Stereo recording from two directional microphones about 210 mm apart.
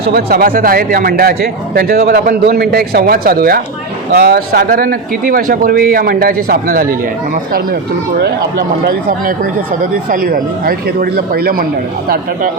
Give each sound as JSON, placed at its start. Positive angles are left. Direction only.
{"t": 0.1, "sound": "speech", "side_deg": -45}
{"t": 8.2, "sound": "speech", "side_deg": -50}